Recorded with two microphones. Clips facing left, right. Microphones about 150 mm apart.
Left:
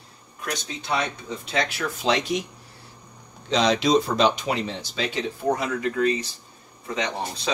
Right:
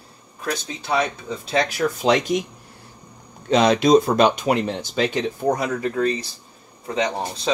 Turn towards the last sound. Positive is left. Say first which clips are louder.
# right 4 dB
turn(degrees=-30)  # may be behind; listen again after turning